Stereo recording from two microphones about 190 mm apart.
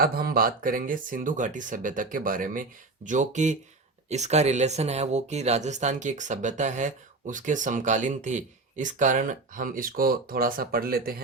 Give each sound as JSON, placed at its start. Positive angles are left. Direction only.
{"t": 0.0, "sound": "speech", "side_deg": -50}